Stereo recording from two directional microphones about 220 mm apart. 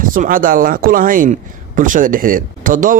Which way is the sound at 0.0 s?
40° right (ahead or behind).